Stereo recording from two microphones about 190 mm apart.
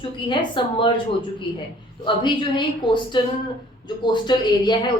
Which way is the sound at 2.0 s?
25° left (ahead or behind).